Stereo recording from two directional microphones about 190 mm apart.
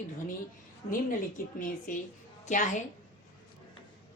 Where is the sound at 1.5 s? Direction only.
45° left (ahead or behind).